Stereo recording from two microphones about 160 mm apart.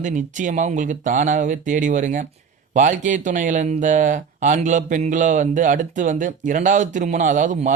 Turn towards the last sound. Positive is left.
turn(degrees=-50)  # may be behind; listen again after turning